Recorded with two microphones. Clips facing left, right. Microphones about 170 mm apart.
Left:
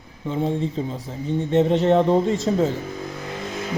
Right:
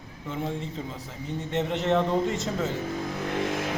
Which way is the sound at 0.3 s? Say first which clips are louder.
Left 8 dB; 30° left (ahead or behind).